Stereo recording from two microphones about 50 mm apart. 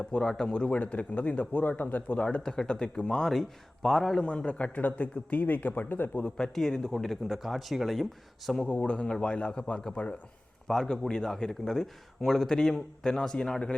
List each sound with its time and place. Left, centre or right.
0.0 s a man's voice: centre
0.7 s a man's voice: left
2.1 s a man's voice: centre
4.2 s a man's voice: left
6.2 s a man's voice: centre
8.7 s a man's voice: left